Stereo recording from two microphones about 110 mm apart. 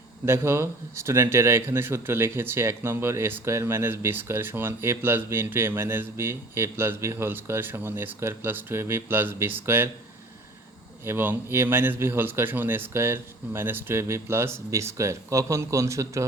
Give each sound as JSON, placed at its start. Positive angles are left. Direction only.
{"t": 0.3, "sound": "speech", "side_deg": -25}
{"t": 11.0, "sound": "speech", "side_deg": -20}